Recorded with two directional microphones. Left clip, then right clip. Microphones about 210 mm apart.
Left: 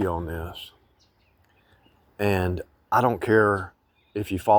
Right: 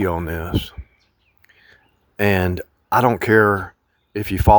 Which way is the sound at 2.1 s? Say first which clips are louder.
Right 6 dB; 35° right (ahead or behind).